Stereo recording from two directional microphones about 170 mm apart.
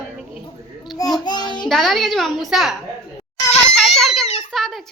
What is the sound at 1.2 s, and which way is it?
Child singing, 25° left (ahead or behind).